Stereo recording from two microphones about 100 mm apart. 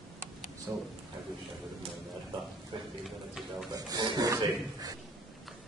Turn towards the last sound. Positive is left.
turn(degrees=-35)  # may be behind; listen again after turning